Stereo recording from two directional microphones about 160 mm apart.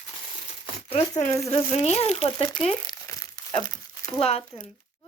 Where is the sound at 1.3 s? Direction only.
20° left (ahead or behind).